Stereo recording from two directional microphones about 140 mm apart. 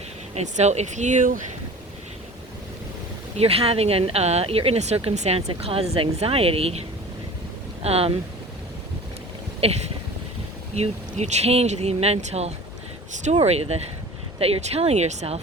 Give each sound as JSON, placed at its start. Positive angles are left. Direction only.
{"t": 0.3, "sound": "speech", "side_deg": -55}
{"t": 3.3, "sound": "speech", "side_deg": -45}
{"t": 9.6, "sound": "speech", "side_deg": -45}